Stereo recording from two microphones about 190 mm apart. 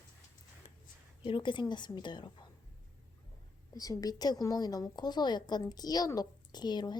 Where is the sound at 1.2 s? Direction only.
25° left (ahead or behind).